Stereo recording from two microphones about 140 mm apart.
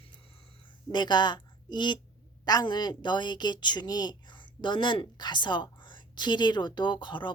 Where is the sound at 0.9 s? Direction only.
30° left (ahead or behind).